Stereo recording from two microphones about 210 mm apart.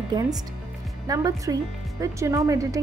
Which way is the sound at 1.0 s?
15° right (ahead or behind).